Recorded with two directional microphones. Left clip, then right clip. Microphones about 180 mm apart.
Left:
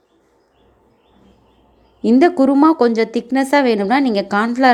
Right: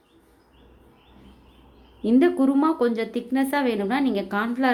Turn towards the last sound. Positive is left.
turn(degrees=35)  # may be behind; listen again after turning